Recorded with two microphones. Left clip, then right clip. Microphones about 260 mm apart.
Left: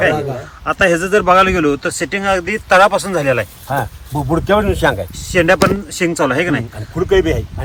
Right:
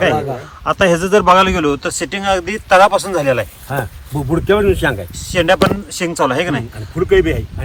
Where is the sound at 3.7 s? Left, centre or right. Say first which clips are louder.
Left 3 dB; centre.